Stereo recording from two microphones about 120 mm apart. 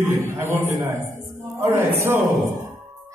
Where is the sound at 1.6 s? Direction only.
20° right (ahead or behind).